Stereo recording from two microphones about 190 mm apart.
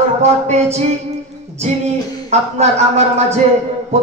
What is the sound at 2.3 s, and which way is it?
Speech, 35° right (ahead or behind).